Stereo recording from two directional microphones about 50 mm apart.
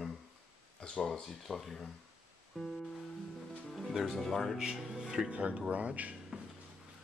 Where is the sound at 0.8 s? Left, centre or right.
Centre.